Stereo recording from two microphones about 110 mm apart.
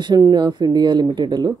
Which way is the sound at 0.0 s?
40° right (ahead or behind).